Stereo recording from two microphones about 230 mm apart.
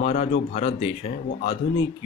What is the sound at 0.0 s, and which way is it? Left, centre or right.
Speech, left.